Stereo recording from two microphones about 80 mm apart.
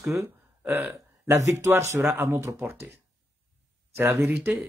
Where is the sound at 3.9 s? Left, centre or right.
Right.